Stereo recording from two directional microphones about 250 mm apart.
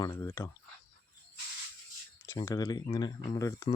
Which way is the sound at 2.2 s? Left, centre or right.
Centre.